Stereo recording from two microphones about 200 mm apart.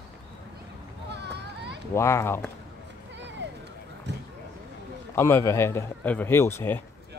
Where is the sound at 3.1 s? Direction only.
65° right (ahead or behind).